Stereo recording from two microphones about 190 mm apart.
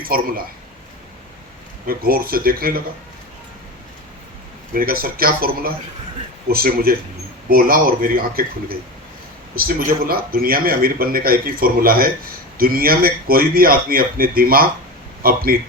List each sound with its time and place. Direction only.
0.0 s speech: 50° right (ahead or behind)
1.9 s speech: 50° right (ahead or behind)
4.7 s speech: 50° right (ahead or behind)
9.6 s speech: 50° right (ahead or behind)